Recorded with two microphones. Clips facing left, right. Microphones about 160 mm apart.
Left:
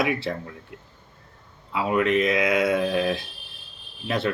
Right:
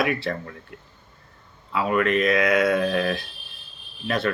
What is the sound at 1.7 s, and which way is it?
Speech, 15° left (ahead or behind).